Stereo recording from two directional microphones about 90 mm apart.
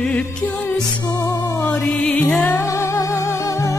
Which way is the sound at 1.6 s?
15° left (ahead or behind).